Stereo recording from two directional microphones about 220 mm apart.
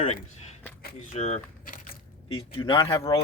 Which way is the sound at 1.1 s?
30° left (ahead or behind).